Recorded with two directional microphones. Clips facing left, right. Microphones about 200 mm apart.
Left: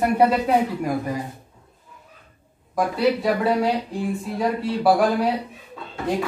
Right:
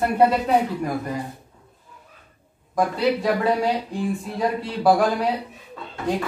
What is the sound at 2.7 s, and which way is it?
Speech, 5° left (ahead or behind).